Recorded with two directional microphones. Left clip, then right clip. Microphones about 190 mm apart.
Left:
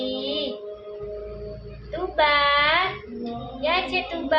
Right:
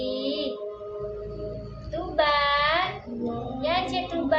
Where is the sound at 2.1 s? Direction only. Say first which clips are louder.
Left 3 dB; 35° left (ahead or behind).